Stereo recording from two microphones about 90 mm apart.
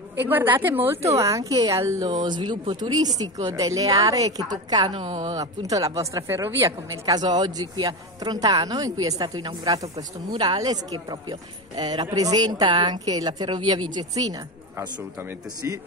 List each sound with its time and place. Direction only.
0.2 s a woman's voice: 25° right (ahead or behind)
1.0 s speech: 35° right (ahead or behind)
2.0 s a woman's voice: 55° right (ahead or behind); by 7.2 s 30° right (ahead or behind)
7.2 s a woman's voice: 50° right (ahead or behind)